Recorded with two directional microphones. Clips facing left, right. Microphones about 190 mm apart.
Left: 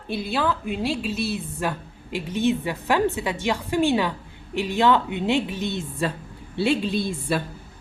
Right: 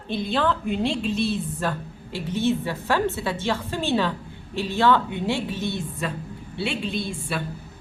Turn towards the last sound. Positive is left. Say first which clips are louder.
# left 4 dB
turn(degrees=40)  # may be behind; listen again after turning